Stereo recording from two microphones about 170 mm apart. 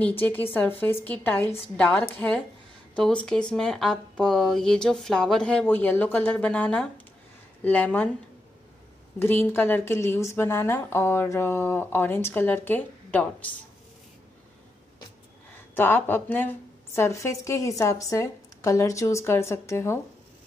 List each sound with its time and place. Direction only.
0.0 s a woman's voice: 10° left (ahead or behind)
9.2 s a woman's voice: 10° left (ahead or behind)
15.7 s a woman's voice: 10° left (ahead or behind)